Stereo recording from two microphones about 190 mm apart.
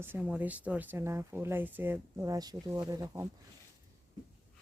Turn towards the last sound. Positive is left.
turn(degrees=-15)  # may be behind; listen again after turning